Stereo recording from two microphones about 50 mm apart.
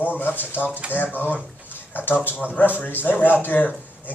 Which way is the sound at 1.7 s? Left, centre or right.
Left.